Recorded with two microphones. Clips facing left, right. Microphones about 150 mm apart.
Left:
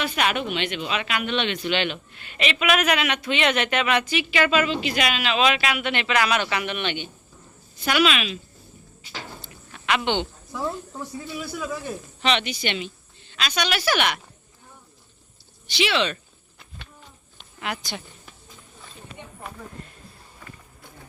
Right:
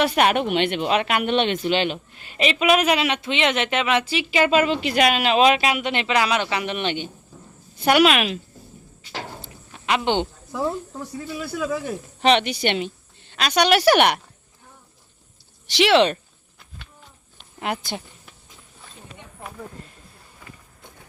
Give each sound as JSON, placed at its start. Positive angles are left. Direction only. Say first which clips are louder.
{"t": 0.0, "sound": "a woman's voice", "louder": "right 6 dB", "side_deg": -50}
{"t": 1.6, "sound": "a man's voice", "louder": "right 3 dB", "side_deg": -40}
{"t": 4.6, "sound": "a man's voice", "louder": "right 5 dB", "side_deg": -50}
{"t": 7.9, "sound": "a woman's voice", "louder": "right 5 dB", "side_deg": -55}
{"t": 9.1, "sound": "a sound", "louder": "right 4 dB", "side_deg": -35}
{"t": 11.4, "sound": "speech", "louder": "right 7 dB", "side_deg": -75}
{"t": 12.2, "sound": "a woman's voice", "louder": "right 6 dB", "side_deg": -55}
{"t": 15.8, "sound": "a woman's voice", "louder": "right 7 dB", "side_deg": -65}
{"t": 17.6, "sound": "speech", "louder": "right 4 dB", "side_deg": -50}